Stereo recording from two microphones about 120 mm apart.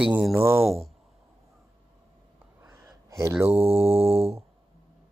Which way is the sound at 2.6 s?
20° right (ahead or behind).